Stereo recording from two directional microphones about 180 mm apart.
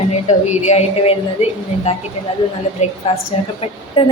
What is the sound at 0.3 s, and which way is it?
A woman's voice, 40° left (ahead or behind).